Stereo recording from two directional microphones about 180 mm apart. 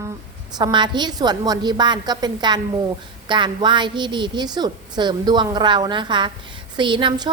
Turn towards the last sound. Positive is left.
turn(degrees=-25)  # may be behind; listen again after turning